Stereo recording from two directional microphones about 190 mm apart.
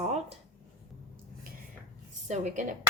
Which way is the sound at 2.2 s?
40° right (ahead or behind).